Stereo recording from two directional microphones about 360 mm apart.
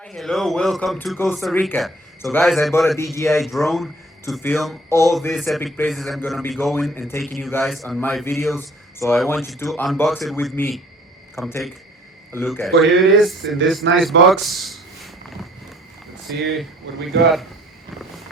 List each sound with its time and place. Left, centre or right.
0.0 s speech: centre
13.8 s speech: right
14.4 s a sound: centre
16.3 s speech: centre